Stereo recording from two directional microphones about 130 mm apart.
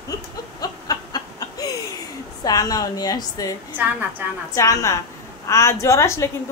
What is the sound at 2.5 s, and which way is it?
Speech, 30° left (ahead or behind).